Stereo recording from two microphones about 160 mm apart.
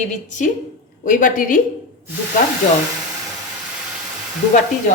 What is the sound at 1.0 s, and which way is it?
Speech, 55° left (ahead or behind).